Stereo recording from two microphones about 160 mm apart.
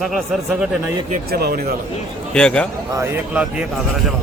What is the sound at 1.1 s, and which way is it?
Speech, 80° right.